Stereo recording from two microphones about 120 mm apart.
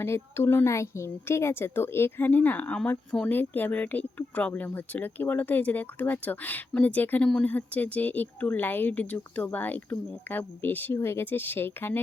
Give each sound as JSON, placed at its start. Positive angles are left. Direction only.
{"t": 0.0, "sound": "speech", "side_deg": 20}